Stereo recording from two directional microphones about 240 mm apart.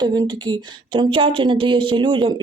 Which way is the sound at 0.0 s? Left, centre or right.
Centre.